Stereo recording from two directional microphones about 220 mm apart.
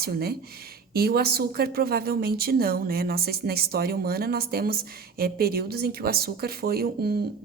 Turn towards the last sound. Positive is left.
turn(degrees=-45)  # may be behind; listen again after turning